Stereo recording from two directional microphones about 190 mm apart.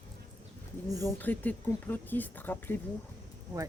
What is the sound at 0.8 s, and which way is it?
Speech, 20° right (ahead or behind).